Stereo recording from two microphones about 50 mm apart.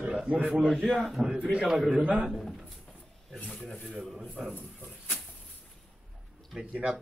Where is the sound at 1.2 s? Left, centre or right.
Centre.